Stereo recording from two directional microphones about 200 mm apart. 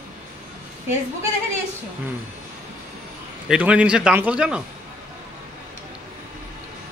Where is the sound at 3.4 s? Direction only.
5° right (ahead or behind).